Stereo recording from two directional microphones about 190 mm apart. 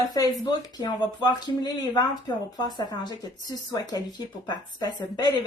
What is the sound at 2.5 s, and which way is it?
Speech, 20° left (ahead or behind).